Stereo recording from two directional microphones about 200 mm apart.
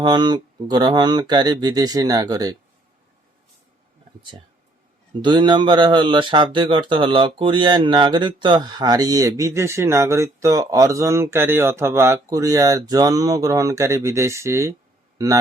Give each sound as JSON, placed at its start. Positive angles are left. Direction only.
{"t": 0.0, "sound": "speech", "side_deg": -20}
{"t": 4.2, "sound": "speech", "side_deg": -25}